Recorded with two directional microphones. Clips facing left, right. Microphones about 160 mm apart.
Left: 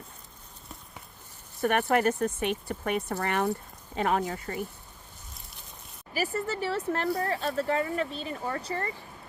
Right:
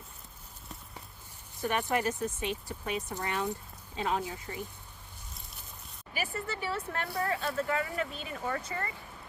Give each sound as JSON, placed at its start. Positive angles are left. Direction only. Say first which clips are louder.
{"t": 1.6, "sound": "speech", "louder": "left 6 dB", "side_deg": 65}
{"t": 6.1, "sound": "speech", "louder": "left 6 dB", "side_deg": 40}